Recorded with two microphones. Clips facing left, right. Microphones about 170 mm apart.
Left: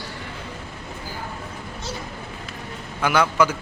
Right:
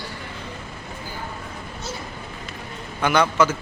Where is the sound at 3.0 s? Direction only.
5° left (ahead or behind).